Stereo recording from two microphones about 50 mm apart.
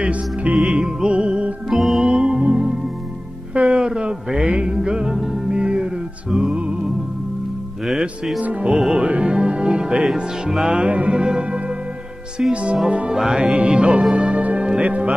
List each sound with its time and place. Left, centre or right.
0.0 s music: right
0.6 s music: centre
1.7 s music: centre
2.0 s music: centre
3.5 s a sound: right
4.6 s music: centre
8.4 s music: right
8.7 s speech: centre
9.0 s music: right
12.4 s speech: centre